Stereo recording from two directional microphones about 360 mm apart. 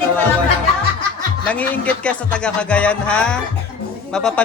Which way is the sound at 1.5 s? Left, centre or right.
Centre.